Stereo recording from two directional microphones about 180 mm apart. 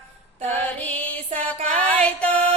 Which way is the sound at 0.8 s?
10° left (ahead or behind).